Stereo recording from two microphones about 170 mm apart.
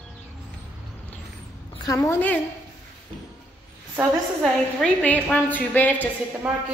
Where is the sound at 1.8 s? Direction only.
20° left (ahead or behind).